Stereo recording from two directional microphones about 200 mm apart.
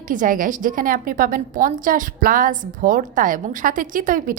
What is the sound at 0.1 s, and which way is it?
A woman's voice, 40° right (ahead or behind).